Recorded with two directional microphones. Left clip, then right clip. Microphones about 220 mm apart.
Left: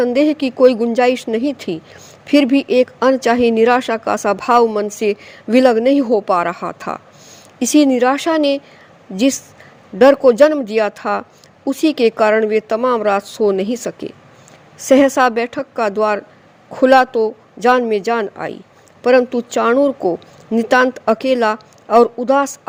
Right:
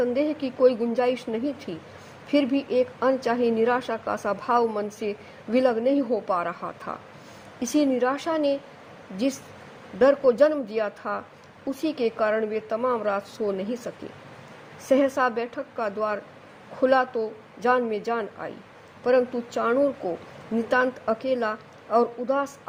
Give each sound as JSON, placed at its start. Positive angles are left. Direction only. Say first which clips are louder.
{"t": 0.0, "sound": "speech", "louder": "left 10 dB", "side_deg": 30}